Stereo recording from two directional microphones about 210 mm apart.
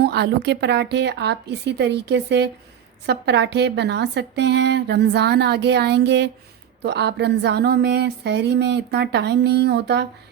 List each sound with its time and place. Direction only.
0.0 s speech: 55° right (ahead or behind)